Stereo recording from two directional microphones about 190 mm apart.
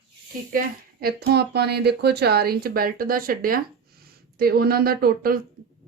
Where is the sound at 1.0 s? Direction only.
60° right (ahead or behind).